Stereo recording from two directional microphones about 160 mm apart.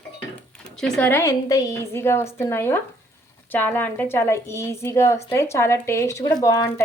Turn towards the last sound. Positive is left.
turn(degrees=15)  # may be behind; listen again after turning